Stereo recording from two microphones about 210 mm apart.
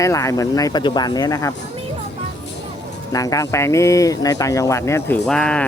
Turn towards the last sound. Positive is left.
turn(degrees=5)  # may be behind; listen again after turning